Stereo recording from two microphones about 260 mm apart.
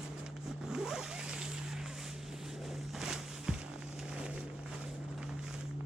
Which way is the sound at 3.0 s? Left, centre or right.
Centre.